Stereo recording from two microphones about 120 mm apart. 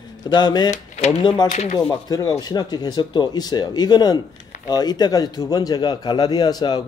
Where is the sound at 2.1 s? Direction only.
30° left (ahead or behind).